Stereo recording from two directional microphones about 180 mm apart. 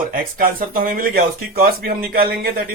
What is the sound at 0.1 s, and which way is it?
Speech, 55° right (ahead or behind).